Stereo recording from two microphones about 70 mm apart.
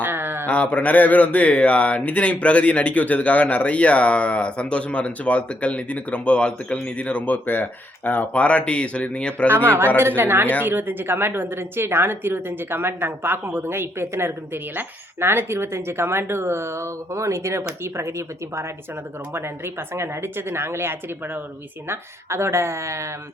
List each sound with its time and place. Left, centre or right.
0.0 s a sound: right
0.4 s speech: left
9.5 s a woman's voice: right
19.3 s a woman's voice: right